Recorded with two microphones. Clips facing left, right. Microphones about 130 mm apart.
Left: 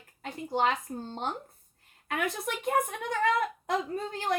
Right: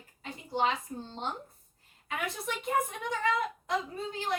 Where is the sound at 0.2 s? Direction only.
50° left (ahead or behind).